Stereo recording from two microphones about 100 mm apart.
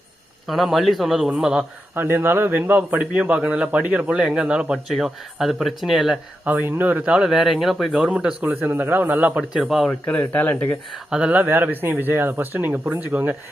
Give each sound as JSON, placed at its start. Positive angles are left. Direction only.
{"t": 0.4, "sound": "speech", "side_deg": 0}
{"t": 2.0, "sound": "speech", "side_deg": -20}
{"t": 6.4, "sound": "speech", "side_deg": -15}
{"t": 9.6, "sound": "speech", "side_deg": 0}
{"t": 9.9, "sound": "speech", "side_deg": 15}
{"t": 11.1, "sound": "speech", "side_deg": -10}